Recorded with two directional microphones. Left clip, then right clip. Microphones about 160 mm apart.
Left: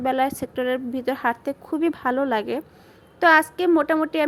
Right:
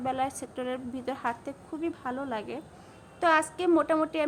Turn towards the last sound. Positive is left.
turn(degrees=30)  # may be behind; listen again after turning